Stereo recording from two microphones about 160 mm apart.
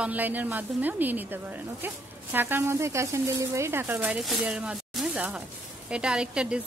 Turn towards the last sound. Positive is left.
turn(degrees=-5)  # may be behind; listen again after turning